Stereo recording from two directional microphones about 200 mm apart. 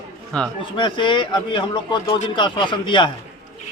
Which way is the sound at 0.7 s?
25° left (ahead or behind).